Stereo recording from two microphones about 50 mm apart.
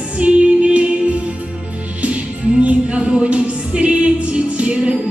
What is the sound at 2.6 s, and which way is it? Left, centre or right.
Music, right.